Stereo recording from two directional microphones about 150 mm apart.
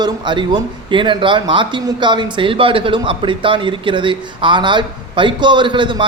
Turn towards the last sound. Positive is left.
turn(degrees=-30)  # may be behind; listen again after turning